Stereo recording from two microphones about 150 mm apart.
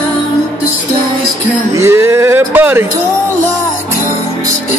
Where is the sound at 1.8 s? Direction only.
20° right (ahead or behind).